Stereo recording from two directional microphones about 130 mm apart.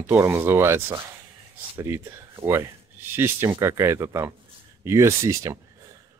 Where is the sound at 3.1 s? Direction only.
20° right (ahead or behind).